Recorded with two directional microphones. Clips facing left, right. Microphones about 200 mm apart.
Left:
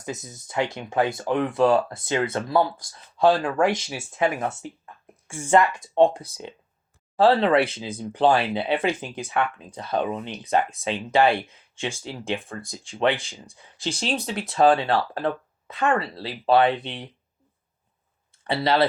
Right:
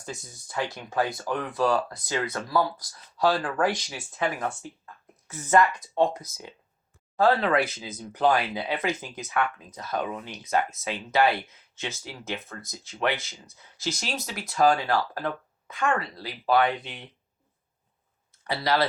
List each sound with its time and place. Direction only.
0.0 s speech: 20° left (ahead or behind)
10.8 s speech: 15° left (ahead or behind)
11.4 s speech: 30° left (ahead or behind)
18.4 s speech: 25° left (ahead or behind)